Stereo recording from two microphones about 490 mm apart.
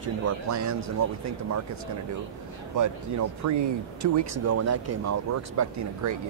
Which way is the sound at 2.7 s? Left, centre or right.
Right.